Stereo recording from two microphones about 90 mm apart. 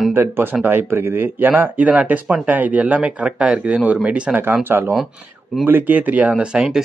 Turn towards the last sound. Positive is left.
turn(degrees=-10)  # may be behind; listen again after turning